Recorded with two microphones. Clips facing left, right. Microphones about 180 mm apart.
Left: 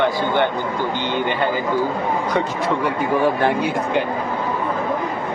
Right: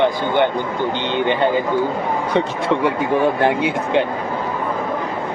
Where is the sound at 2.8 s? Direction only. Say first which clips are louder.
Right 1 dB; 20° right (ahead or behind).